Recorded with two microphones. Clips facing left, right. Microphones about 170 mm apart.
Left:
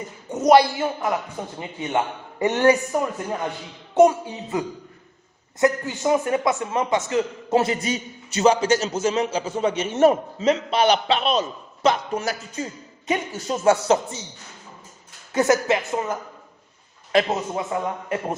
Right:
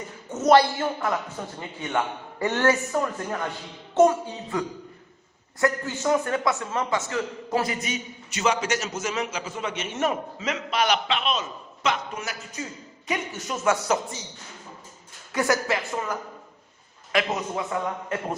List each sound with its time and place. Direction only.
0.3 s a man's voice: 15° left (ahead or behind)
15.3 s a man's voice: 20° left (ahead or behind)